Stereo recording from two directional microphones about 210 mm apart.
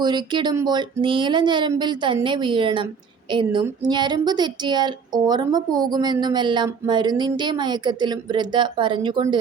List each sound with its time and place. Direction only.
0.0 s speech: 20° right (ahead or behind)